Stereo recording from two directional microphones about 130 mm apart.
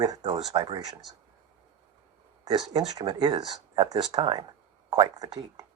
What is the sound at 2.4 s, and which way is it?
Speech, 30° right (ahead or behind).